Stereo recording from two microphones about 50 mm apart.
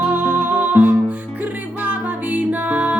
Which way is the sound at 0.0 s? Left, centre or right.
Right.